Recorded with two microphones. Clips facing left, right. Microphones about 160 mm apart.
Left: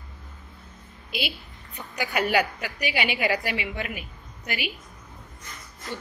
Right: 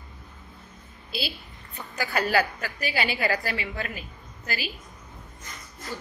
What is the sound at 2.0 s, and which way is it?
A woman's voice, 15° left (ahead or behind).